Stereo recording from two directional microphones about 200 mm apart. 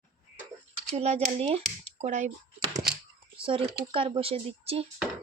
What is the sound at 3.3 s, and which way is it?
Speech, 25° right (ahead or behind).